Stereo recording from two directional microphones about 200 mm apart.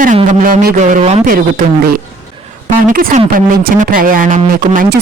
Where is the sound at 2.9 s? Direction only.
45° right (ahead or behind).